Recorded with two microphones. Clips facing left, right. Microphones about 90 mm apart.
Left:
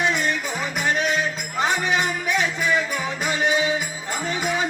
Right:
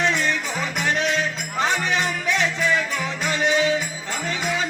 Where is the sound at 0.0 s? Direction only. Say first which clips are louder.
Even; 10° left (ahead or behind).